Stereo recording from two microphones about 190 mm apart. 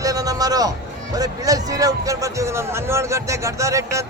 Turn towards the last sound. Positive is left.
turn(degrees=-15)  # may be behind; listen again after turning